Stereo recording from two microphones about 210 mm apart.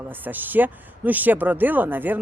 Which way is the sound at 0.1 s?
10° right (ahead or behind).